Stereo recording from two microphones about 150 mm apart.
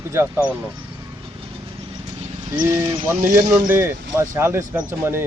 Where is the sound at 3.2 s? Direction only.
70° right (ahead or behind).